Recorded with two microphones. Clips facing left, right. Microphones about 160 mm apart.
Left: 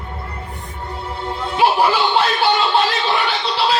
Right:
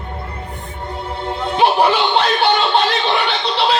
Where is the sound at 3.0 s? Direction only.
25° right (ahead or behind).